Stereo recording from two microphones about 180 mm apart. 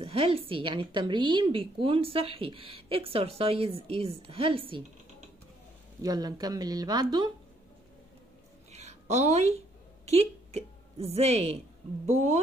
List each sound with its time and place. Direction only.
0.0 s a woman's voice: 30° right (ahead or behind)
6.0 s speech: 20° right (ahead or behind)
8.7 s a sound: 40° right (ahead or behind)
10.0 s a woman's voice: 35° right (ahead or behind)